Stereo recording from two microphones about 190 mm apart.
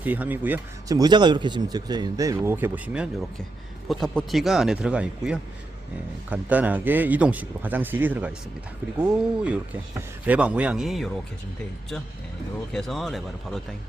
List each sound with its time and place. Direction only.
0.0 s speech: 10° right (ahead or behind)
12.7 s speech: centre (ahead or behind)